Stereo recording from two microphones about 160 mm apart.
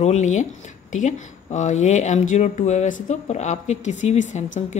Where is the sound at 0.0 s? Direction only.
45° left (ahead or behind).